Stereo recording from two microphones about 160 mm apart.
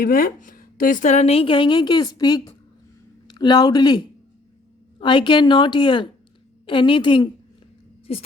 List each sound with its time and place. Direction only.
0.0 s speech: 60° left (ahead or behind); by 7.3 s 30° left (ahead or behind)
8.1 s speech: 40° left (ahead or behind)